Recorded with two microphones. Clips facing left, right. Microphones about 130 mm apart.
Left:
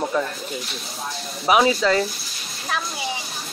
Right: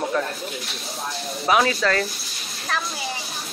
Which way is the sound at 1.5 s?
15° left (ahead or behind).